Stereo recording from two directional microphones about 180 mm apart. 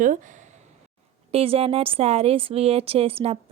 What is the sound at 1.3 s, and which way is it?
A woman's voice, 35° right (ahead or behind).